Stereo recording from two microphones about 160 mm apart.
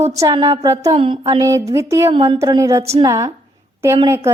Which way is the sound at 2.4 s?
20° right (ahead or behind).